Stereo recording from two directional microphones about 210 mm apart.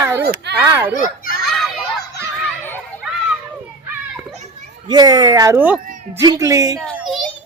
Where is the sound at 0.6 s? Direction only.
10° right (ahead or behind).